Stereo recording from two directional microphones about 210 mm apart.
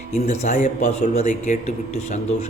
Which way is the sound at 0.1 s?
35° left (ahead or behind).